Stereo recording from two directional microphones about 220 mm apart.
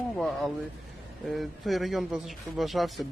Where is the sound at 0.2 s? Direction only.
Centre (ahead or behind).